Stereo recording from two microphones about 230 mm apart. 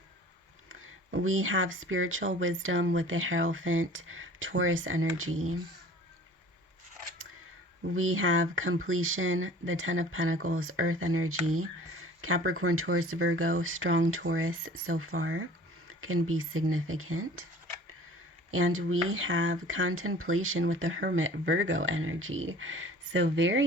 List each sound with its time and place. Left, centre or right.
0.7 s speech: right
7.9 s speech: right
18.5 s speech: right